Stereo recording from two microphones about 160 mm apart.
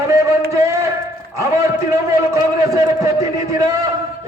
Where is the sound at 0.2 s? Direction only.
20° right (ahead or behind).